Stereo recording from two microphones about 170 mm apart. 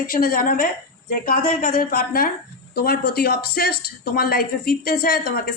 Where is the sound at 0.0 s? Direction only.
55° left (ahead or behind).